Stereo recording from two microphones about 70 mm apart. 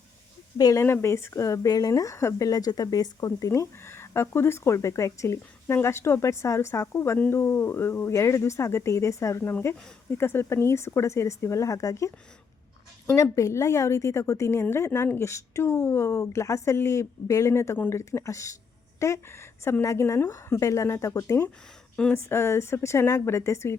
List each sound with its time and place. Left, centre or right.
0.6 s speech: left
9.5 s speech: left
13.1 s a woman's voice: left